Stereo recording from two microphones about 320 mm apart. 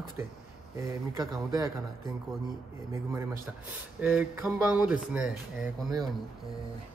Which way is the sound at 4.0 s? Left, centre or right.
Centre.